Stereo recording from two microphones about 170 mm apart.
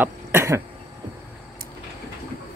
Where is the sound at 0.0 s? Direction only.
15° right (ahead or behind).